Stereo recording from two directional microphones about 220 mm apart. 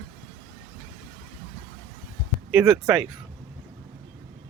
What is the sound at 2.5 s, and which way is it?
Speech, 10° right (ahead or behind).